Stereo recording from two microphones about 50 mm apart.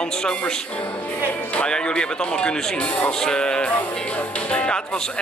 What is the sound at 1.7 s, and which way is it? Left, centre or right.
Speech, centre.